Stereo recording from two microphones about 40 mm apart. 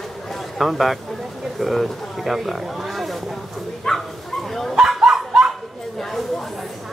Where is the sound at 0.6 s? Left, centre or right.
Centre.